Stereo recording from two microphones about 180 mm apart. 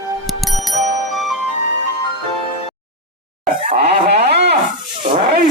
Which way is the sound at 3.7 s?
60° right (ahead or behind).